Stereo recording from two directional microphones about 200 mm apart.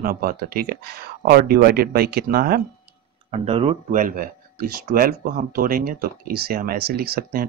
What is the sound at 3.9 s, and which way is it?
Speech, 45° right (ahead or behind).